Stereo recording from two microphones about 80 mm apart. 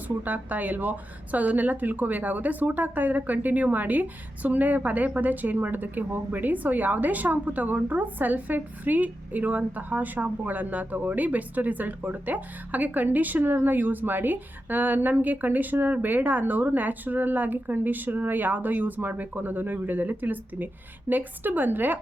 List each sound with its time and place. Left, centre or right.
0.2 s speech: right